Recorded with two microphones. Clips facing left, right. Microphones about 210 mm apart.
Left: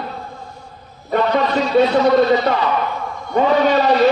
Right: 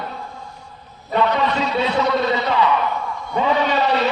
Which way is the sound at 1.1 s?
40° left (ahead or behind).